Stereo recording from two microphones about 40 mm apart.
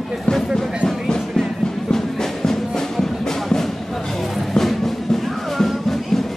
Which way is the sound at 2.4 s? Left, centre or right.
Centre.